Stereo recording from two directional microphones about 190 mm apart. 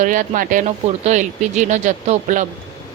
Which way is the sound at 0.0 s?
45° right (ahead or behind).